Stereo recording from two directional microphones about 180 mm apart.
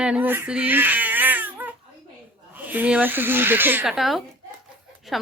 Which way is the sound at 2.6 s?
10° right (ahead or behind).